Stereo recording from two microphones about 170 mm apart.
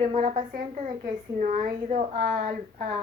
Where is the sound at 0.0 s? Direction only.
45° right (ahead or behind).